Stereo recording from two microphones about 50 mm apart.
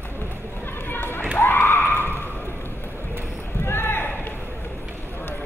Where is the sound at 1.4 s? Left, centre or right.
Left.